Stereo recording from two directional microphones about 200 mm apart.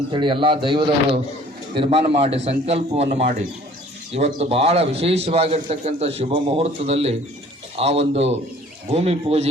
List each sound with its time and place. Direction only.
0.1 s a man's voice: 25° right (ahead or behind)